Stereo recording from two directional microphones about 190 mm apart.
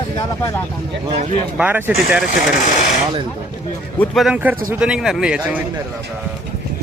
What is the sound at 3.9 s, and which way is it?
Speech, 5° left (ahead or behind).